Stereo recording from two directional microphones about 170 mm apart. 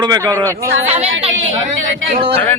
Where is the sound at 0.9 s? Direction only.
35° right (ahead or behind).